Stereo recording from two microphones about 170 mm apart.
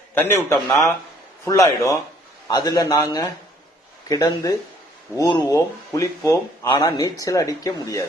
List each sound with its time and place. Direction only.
0.1 s speech: 15° left (ahead or behind)